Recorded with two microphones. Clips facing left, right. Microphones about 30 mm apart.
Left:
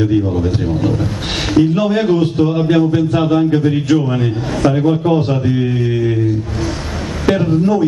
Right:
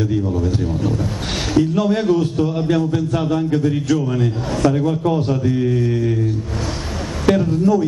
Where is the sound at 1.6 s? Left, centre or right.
Left.